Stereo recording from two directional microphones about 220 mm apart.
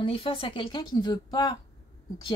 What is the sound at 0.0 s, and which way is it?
Speech, 25° left (ahead or behind).